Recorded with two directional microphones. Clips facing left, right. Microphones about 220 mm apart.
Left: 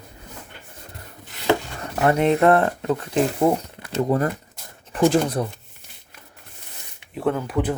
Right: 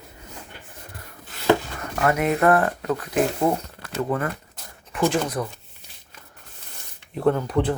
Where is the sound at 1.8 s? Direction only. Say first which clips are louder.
Left 3 dB; 30° left (ahead or behind).